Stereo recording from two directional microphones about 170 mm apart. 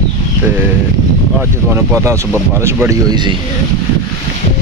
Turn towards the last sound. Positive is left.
turn(degrees=-25)  # may be behind; listen again after turning